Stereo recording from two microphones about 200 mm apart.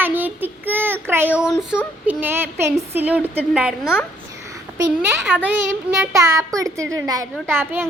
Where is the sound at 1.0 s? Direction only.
10° right (ahead or behind).